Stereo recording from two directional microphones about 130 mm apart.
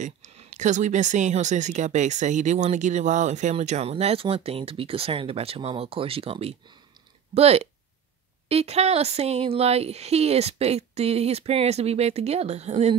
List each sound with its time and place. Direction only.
0.0 s speech: 70° right (ahead or behind)